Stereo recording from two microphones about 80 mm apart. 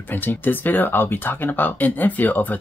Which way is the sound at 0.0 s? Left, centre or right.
Left.